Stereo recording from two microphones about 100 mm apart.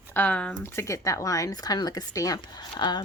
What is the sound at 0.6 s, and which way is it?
Speech, 25° left (ahead or behind).